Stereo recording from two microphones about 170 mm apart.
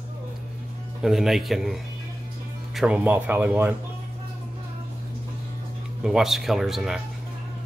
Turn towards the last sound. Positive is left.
turn(degrees=0)  # may be behind; listen again after turning